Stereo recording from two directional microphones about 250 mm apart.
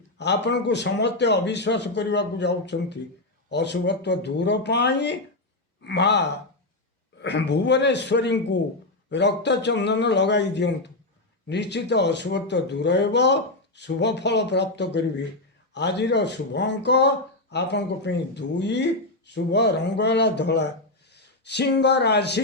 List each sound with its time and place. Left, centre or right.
0.2 s speech: left